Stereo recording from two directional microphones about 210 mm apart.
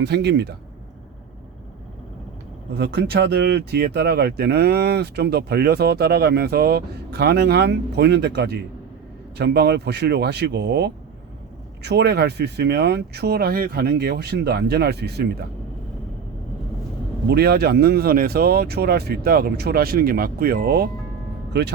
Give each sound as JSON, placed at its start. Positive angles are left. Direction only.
{"t": 0.0, "sound": "speech", "side_deg": -55}
{"t": 2.7, "sound": "speech", "side_deg": -50}
{"t": 17.2, "sound": "speech", "side_deg": -50}